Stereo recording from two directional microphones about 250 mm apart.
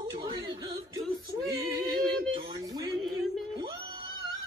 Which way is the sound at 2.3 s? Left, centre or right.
Centre.